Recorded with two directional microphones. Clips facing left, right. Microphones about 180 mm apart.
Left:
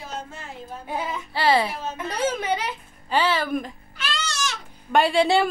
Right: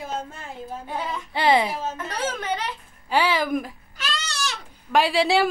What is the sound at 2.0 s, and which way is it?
Speech, 10° left (ahead or behind).